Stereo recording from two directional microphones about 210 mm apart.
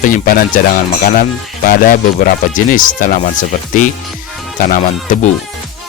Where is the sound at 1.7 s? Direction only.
40° left (ahead or behind).